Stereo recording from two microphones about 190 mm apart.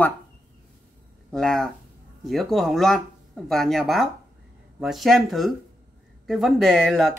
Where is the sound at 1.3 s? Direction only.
5° left (ahead or behind).